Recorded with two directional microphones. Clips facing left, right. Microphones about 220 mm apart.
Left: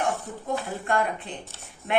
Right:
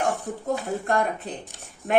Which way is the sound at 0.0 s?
40° right (ahead or behind).